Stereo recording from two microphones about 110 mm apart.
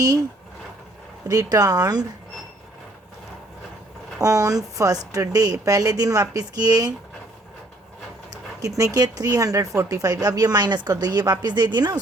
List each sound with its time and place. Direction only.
1.3 s speech: 35° right (ahead or behind)
4.2 s speech: 30° right (ahead or behind)
8.3 s speech: 35° right (ahead or behind)